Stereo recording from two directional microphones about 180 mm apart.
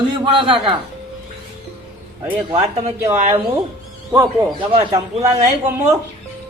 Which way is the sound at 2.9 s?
15° right (ahead or behind).